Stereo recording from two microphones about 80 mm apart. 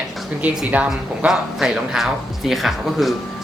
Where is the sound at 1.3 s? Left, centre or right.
Centre.